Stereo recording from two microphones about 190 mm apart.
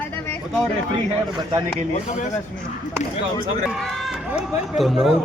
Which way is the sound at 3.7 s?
Centre (ahead or behind).